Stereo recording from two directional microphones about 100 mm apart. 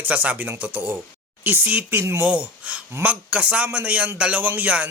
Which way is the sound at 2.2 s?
15° right (ahead or behind).